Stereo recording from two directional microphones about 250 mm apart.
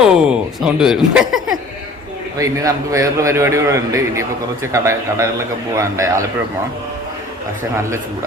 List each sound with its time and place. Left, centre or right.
0.0 s speech: centre
2.4 s a man's voice: centre